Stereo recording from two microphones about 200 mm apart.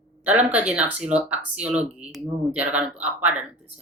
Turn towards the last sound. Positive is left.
turn(degrees=-5)  # may be behind; listen again after turning